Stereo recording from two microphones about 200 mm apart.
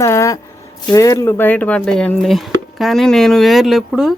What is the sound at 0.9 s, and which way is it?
Speech, 15° left (ahead or behind).